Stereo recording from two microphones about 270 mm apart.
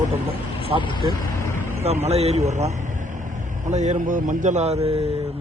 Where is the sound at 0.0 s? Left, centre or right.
Right.